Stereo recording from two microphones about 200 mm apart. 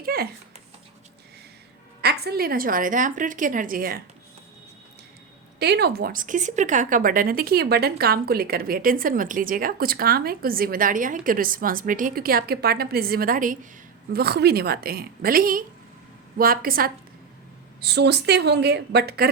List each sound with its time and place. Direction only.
0.0 s a sound: 50° right (ahead or behind)
2.0 s speech: 55° right (ahead or behind)
5.5 s speech: 55° right (ahead or behind)
14.1 s speech: 55° right (ahead or behind)